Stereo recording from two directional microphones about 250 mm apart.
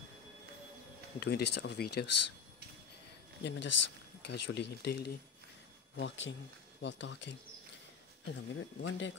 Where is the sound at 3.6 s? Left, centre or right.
Left.